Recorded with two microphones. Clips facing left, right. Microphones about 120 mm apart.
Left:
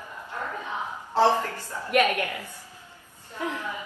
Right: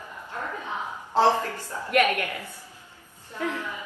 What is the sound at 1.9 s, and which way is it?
Speech, 15° left (ahead or behind).